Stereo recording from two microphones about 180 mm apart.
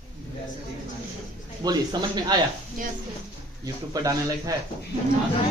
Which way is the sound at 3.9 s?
20° right (ahead or behind).